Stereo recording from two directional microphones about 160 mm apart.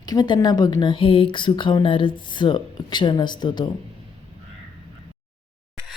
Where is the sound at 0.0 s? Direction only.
25° left (ahead or behind).